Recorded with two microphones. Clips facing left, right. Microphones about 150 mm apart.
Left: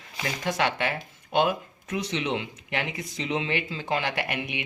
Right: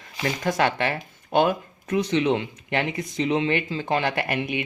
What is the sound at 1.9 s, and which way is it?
Speech, 40° right (ahead or behind).